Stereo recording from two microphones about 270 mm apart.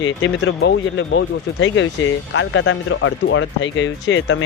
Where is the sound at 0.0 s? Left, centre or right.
Left.